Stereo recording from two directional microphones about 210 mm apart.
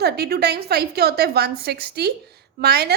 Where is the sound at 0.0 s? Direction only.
50° right (ahead or behind).